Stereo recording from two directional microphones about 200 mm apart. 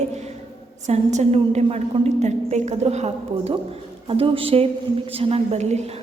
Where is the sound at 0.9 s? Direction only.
35° right (ahead or behind).